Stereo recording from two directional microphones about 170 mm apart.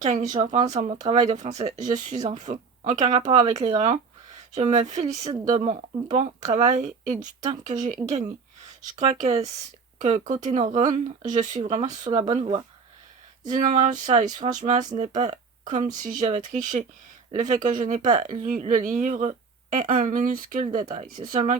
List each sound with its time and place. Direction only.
0.0 s speech: 45° right (ahead or behind)
9.2 s speech: 40° right (ahead or behind)
12.0 s speech: 25° right (ahead or behind)
13.5 s speech: 45° right (ahead or behind)
20.9 s speech: 40° right (ahead or behind)